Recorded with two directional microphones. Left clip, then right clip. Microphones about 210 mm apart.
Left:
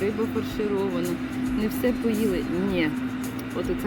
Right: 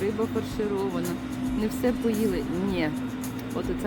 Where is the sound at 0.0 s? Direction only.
Centre (ahead or behind).